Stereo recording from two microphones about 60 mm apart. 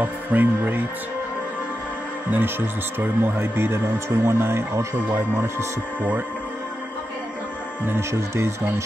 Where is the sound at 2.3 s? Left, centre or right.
Right.